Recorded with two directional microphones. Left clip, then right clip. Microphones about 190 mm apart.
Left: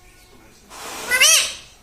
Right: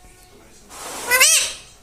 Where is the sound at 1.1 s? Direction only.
20° right (ahead or behind).